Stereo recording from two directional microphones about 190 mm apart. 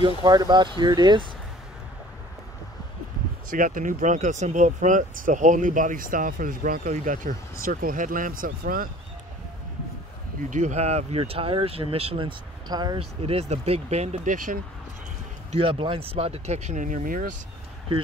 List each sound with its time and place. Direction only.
0.0 s speech: 20° right (ahead or behind)
3.4 s speech: 45° right (ahead or behind)
10.5 s speech: 40° right (ahead or behind)
15.5 s speech: 25° right (ahead or behind); by 17.4 s 45° right (ahead or behind)